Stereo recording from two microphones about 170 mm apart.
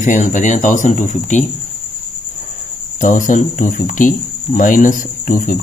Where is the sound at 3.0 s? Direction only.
50° left (ahead or behind).